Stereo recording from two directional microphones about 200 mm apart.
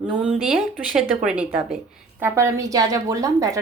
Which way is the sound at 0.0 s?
5° right (ahead or behind).